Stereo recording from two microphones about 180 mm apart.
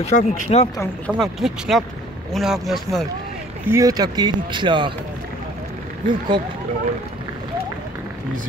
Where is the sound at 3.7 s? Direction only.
20° right (ahead or behind).